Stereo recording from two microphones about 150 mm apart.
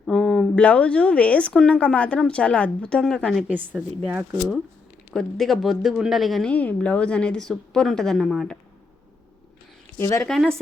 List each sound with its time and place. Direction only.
0.0 s speech: 5° left (ahead or behind)
3.4 s speech: 10° right (ahead or behind)
5.1 s a woman's voice: centre (ahead or behind)
10.0 s a woman's voice: 20° left (ahead or behind)
10.2 s a woman's voice: centre (ahead or behind)